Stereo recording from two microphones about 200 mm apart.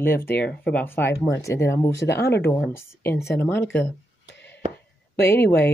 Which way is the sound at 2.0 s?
55° left (ahead or behind).